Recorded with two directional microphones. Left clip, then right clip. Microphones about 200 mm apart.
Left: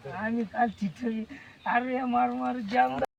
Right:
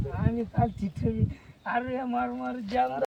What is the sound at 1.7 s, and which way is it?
Speech, 40° right (ahead or behind).